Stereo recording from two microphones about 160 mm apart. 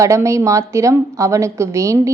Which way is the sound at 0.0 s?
20° right (ahead or behind).